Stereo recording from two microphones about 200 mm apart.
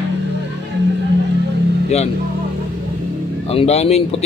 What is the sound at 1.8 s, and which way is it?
Speech, 35° left (ahead or behind).